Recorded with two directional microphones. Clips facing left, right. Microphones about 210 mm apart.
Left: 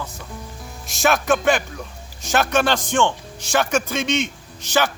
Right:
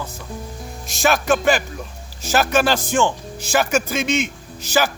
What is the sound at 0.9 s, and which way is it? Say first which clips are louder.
A man's voice: right 1 dB; centre (ahead or behind).